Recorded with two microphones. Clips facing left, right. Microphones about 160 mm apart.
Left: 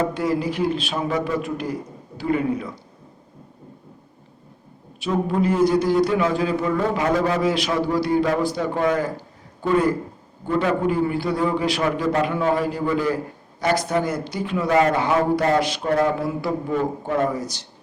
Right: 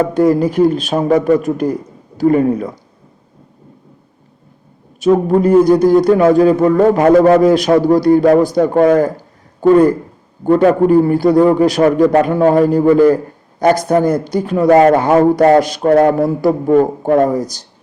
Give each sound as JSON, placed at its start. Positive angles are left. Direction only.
{"t": 0.0, "sound": "speech", "side_deg": -45}
{"t": 4.9, "sound": "speech", "side_deg": -45}